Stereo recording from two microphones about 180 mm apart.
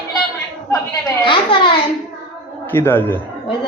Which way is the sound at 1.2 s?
30° left (ahead or behind).